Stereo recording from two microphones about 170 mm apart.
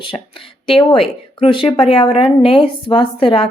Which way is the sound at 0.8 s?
30° left (ahead or behind).